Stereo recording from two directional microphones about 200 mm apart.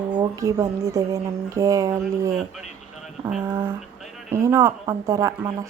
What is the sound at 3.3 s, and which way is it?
Speech, 10° right (ahead or behind).